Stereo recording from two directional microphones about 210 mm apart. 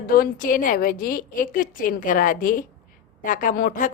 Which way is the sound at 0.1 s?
45° left (ahead or behind).